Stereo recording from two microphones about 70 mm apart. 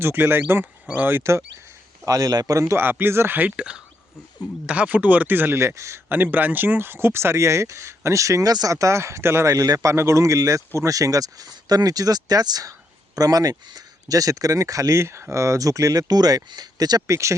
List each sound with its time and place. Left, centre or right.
0.0 s speech: right
0.9 s speech: right
1.1 s speech: right
2.0 s speech: right
2.7 s speech: right
5.5 s speech: right
6.1 s speech: right
9.5 s speech: right
9.9 s speech: right
17.1 s speech: right